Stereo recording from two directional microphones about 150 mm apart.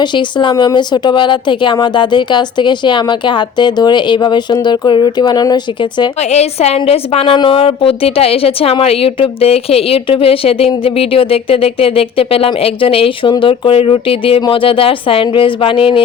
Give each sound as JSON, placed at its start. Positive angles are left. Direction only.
{"t": 0.0, "sound": "a woman's voice", "side_deg": 30}
{"t": 6.3, "sound": "a woman's voice", "side_deg": 45}